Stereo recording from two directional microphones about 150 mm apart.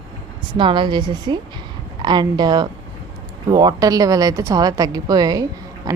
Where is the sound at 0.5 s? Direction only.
30° right (ahead or behind).